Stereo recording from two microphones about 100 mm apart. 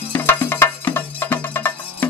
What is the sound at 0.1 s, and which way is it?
Music, 20° left (ahead or behind).